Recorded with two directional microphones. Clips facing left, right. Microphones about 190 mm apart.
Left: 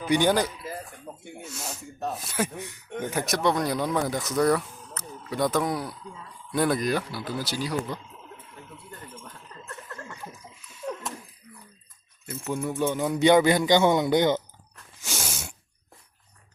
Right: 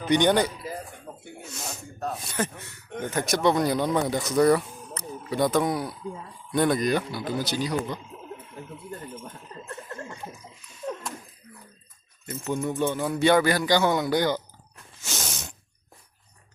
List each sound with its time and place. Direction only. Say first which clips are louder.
0.0 s speech: right 1 dB; 5° left (ahead or behind)
4.6 s a sound: right 4 dB; 15° right (ahead or behind)
5.3 s speech: right 2 dB; centre (ahead or behind)
7.2 s speech: right 3 dB; 20° right (ahead or behind)
7.6 s speech: right 2 dB; 5° left (ahead or behind)
8.7 s a sound: right 6 dB; 25° right (ahead or behind)
12.2 s a man's voice: right 1 dB; 5° left (ahead or behind)
15.0 s sneeze: even; 10° left (ahead or behind)